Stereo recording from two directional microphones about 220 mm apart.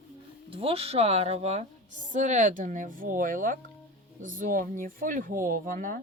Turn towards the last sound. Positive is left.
turn(degrees=-35)  # may be behind; listen again after turning